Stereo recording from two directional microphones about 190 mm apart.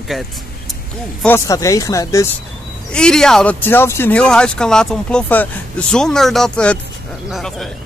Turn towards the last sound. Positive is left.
turn(degrees=0)  # may be behind; listen again after turning